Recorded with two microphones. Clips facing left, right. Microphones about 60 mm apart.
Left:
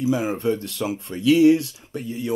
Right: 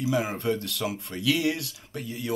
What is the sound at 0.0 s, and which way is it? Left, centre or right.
Speech, left.